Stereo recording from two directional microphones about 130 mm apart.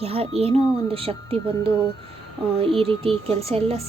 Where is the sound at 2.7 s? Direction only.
45° right (ahead or behind).